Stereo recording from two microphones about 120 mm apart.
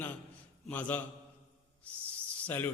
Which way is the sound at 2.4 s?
15° left (ahead or behind).